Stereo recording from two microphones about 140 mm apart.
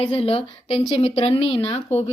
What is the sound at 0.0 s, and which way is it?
A woman's voice, 45° left (ahead or behind).